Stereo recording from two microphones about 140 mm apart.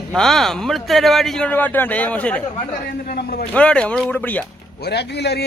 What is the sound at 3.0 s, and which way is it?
Speech, 90° left.